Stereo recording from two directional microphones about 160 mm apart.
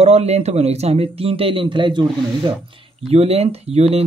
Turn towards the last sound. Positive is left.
turn(degrees=-40)  # may be behind; listen again after turning